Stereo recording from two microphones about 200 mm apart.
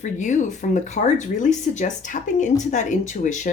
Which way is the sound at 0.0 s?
35° left (ahead or behind).